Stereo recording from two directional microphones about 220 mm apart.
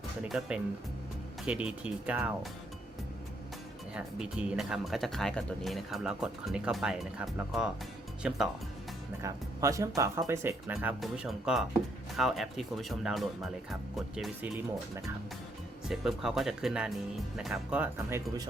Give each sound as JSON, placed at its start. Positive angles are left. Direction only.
{"t": 0.3, "sound": "speech", "side_deg": -5}
{"t": 3.9, "sound": "speech", "side_deg": -5}
{"t": 15.9, "sound": "speech", "side_deg": 0}